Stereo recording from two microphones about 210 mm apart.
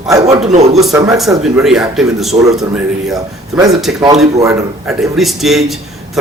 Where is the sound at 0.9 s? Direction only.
15° right (ahead or behind).